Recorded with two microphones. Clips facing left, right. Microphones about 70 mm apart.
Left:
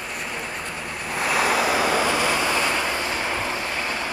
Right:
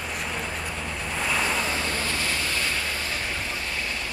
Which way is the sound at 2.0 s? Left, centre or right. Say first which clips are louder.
Left 7 dB; centre.